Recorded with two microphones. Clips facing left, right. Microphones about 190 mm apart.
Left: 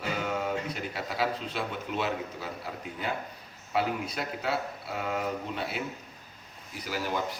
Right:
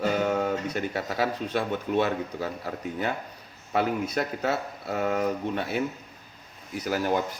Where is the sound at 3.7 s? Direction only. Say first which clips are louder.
Right 4 dB; 50° right (ahead or behind).